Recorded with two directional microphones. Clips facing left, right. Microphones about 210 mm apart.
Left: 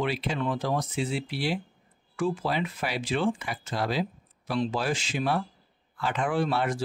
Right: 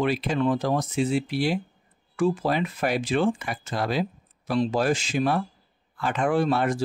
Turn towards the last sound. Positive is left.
turn(degrees=-45)  # may be behind; listen again after turning